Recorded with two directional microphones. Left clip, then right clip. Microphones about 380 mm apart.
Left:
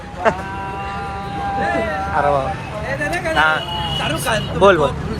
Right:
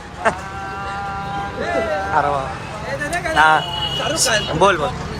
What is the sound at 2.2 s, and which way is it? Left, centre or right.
Speech, centre.